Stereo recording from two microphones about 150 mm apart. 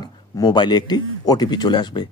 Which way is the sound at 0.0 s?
25° left (ahead or behind).